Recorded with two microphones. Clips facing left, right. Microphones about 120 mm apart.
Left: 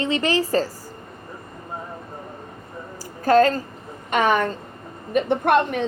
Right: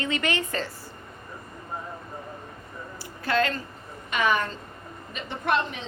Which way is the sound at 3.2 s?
40° left (ahead or behind).